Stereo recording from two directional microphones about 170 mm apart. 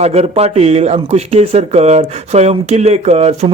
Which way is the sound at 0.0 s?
40° right (ahead or behind).